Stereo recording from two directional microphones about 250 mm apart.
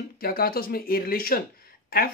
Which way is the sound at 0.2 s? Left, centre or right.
Left.